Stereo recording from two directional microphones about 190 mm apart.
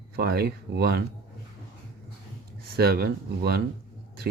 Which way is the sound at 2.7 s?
55° right (ahead or behind).